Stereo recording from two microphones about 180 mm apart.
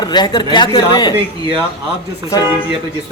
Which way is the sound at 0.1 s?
25° left (ahead or behind).